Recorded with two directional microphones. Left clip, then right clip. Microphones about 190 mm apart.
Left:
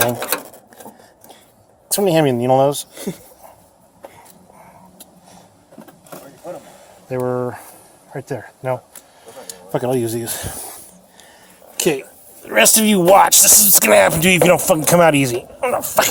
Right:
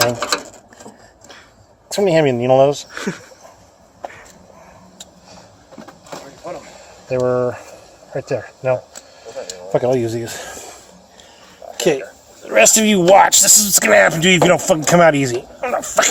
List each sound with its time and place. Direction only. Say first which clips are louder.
1.9 s speech: right 1 dB; 55° left (ahead or behind)
7.1 s speech: right 4 dB; 65° left (ahead or behind)
11.8 s speech: right 2 dB; 50° left (ahead or behind)